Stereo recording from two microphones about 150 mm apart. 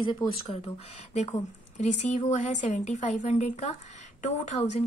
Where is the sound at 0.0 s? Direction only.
35° left (ahead or behind).